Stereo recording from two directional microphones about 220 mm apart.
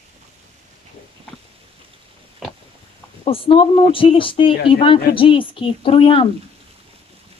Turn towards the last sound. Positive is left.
turn(degrees=25)  # may be behind; listen again after turning